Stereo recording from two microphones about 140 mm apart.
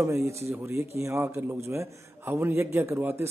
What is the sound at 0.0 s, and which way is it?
A man's voice, 20° right (ahead or behind).